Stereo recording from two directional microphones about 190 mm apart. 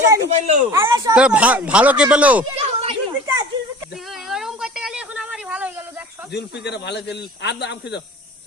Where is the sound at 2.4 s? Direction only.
30° right (ahead or behind).